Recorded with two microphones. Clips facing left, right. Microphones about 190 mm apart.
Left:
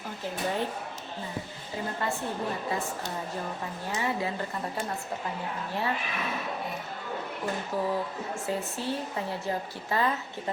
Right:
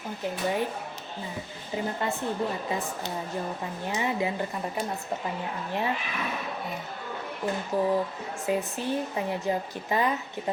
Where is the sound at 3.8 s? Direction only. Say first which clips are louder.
Right 2 dB; 20° right (ahead or behind).